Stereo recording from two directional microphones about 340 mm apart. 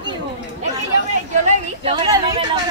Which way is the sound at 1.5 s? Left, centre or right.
Centre.